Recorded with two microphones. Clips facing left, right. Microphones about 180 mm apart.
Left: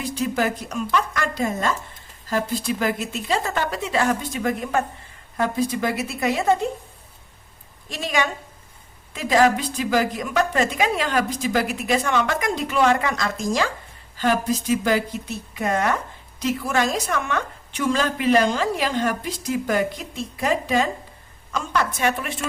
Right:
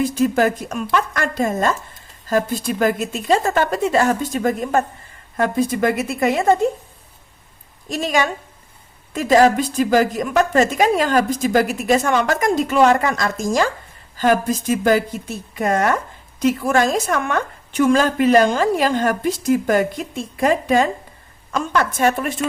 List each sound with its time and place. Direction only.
0.0 s a woman's voice: 50° right (ahead or behind)
7.9 s a woman's voice: 45° right (ahead or behind)